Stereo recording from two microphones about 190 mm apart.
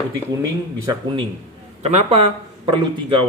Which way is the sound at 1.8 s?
35° right (ahead or behind).